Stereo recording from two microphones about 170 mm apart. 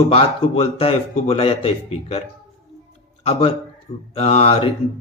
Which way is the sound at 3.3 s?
35° left (ahead or behind).